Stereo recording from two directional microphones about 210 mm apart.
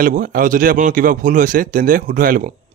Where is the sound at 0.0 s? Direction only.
40° right (ahead or behind).